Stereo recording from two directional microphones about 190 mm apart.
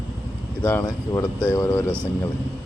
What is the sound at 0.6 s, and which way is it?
Speech, 15° left (ahead or behind).